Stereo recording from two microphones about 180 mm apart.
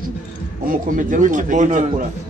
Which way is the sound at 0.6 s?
50° right (ahead or behind).